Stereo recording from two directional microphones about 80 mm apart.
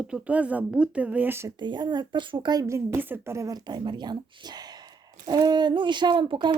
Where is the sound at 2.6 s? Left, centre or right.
Right.